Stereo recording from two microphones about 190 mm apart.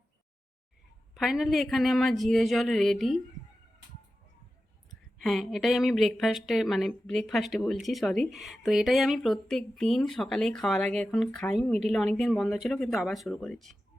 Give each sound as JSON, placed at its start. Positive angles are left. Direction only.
{"t": 1.1, "sound": "speech", "side_deg": 0}
{"t": 4.9, "sound": "speech", "side_deg": 0}